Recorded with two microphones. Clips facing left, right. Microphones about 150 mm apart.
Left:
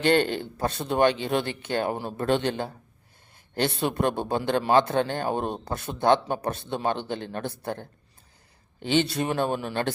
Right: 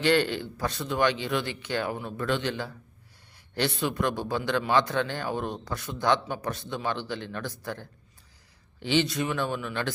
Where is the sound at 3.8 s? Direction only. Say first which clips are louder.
Left 4 dB; 30° left (ahead or behind).